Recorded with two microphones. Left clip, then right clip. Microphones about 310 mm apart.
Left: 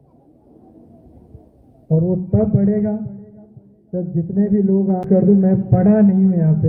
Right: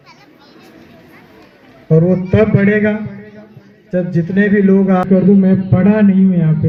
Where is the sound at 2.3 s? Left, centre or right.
Right.